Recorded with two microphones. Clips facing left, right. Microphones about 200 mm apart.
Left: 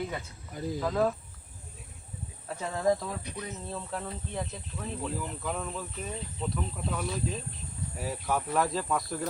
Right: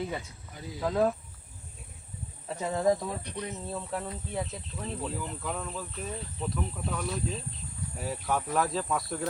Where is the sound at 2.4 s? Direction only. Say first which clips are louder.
Right 1 dB; 15° right (ahead or behind).